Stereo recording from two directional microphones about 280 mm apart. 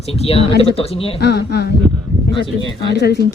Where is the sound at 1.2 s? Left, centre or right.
Left.